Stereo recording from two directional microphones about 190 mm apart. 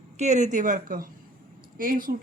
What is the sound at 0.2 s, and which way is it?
Speech, 40° right (ahead or behind).